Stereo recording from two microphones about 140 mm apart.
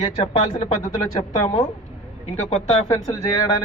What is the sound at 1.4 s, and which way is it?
Speech, 55° left (ahead or behind).